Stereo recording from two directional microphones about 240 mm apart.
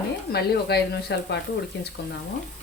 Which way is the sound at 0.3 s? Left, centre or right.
Left.